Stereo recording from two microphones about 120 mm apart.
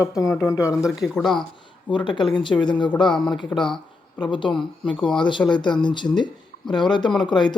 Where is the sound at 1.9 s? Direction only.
40° left (ahead or behind).